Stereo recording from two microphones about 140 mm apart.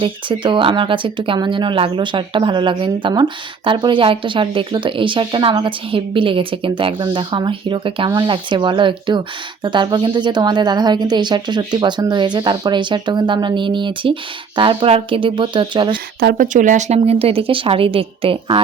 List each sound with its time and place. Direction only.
0.0 s speech: 35° right (ahead or behind)
16.4 s speech: 65° right (ahead or behind); by 18.6 s 40° right (ahead or behind)